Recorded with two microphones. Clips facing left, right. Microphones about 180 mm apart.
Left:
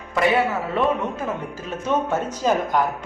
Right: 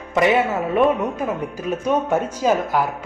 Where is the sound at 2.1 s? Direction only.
10° right (ahead or behind).